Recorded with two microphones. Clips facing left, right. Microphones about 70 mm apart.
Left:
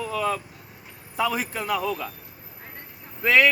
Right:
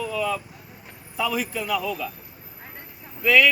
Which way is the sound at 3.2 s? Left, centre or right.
Left.